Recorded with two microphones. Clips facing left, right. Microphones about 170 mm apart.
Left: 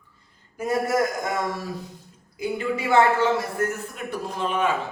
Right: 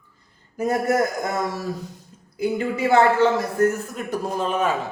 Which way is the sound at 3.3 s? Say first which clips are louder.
Right 6 dB; 40° right (ahead or behind).